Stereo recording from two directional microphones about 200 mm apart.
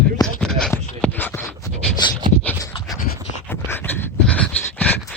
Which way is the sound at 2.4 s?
10° left (ahead or behind).